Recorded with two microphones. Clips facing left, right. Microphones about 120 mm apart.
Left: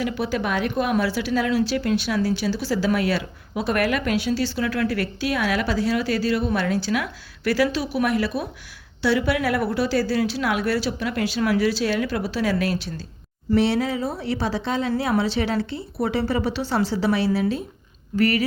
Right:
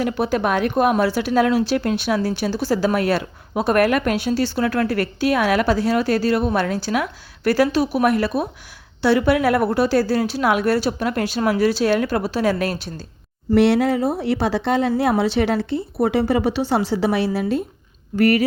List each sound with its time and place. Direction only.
0.0 s speech: 50° right (ahead or behind)
13.5 s speech: 65° right (ahead or behind)